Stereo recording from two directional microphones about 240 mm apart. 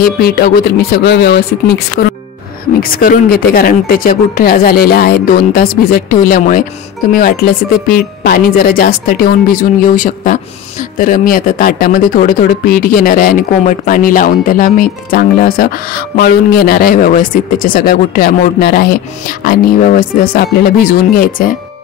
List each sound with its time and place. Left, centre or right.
0.0 s speech: left
2.8 s speech: left